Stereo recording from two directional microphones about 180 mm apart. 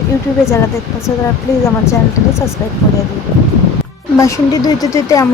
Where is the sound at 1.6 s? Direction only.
15° left (ahead or behind).